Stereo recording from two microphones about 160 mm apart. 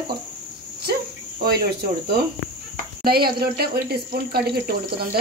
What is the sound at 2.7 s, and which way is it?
Speech, 75° right (ahead or behind).